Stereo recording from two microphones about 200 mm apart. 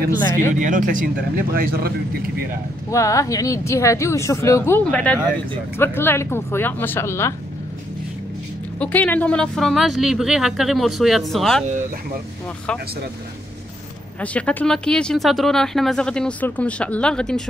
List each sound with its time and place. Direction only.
0.6 s speech: 40° right (ahead or behind)
2.9 s speech: 15° left (ahead or behind)
8.7 s speech: 5° left (ahead or behind)
14.2 s speech: 5° left (ahead or behind)